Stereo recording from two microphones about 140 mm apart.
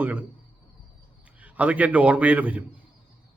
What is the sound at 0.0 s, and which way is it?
Speech, 10° right (ahead or behind).